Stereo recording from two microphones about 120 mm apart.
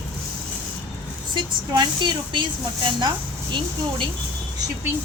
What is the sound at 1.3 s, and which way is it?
Speech, 40° right (ahead or behind).